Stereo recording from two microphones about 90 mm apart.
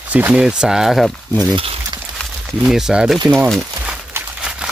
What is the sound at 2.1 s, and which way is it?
Speech, centre (ahead or behind).